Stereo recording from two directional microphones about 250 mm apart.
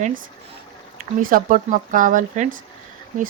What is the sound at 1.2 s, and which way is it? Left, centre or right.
Speech, right.